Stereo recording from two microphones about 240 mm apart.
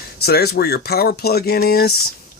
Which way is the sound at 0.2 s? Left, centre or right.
Left.